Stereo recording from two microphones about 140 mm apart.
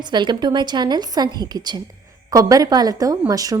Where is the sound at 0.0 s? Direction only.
35° right (ahead or behind).